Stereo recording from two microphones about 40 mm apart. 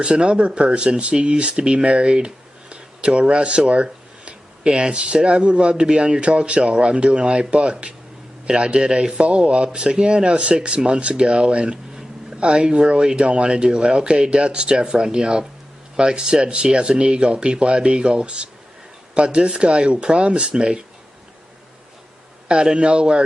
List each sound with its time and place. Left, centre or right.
0.0 s speech: right
22.4 s speech: right